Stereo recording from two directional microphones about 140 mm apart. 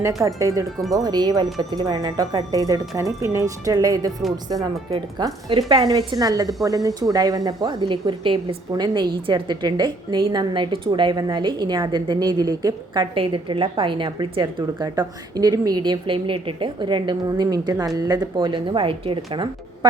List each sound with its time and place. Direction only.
0.2 s a woman's voice: 25° right (ahead or behind)
13.1 s speech: 40° right (ahead or behind)